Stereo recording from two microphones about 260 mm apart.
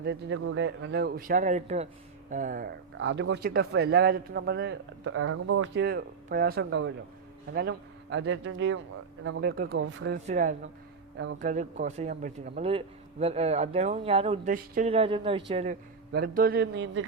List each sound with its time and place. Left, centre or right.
0.0 s speech: right
9.4 s speech: right
10.2 s speech: right